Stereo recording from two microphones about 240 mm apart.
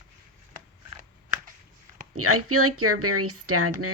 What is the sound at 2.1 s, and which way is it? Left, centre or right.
Speech, right.